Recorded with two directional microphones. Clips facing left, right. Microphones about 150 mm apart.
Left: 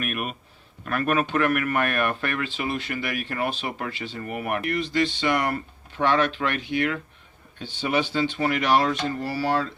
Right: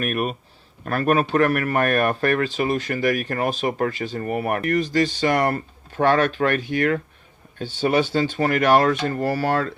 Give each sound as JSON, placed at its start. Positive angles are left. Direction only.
{"t": 0.0, "sound": "speech", "side_deg": -40}